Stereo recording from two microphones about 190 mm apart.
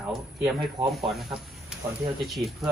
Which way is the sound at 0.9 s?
Centre (ahead or behind).